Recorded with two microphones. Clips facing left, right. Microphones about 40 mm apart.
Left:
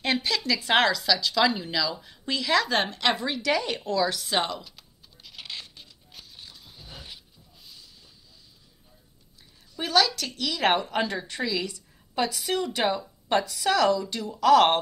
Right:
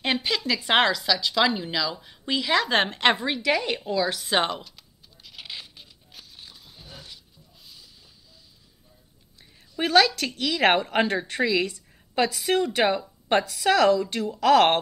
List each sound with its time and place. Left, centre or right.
0.0 s a sound: centre
0.5 s speech: centre
2.7 s a woman's voice: right
3.4 s speech: right
4.3 s a woman's voice: right
4.6 s a sound: centre
6.9 s dog: centre
7.6 s hiss: centre
9.8 s a woman's voice: right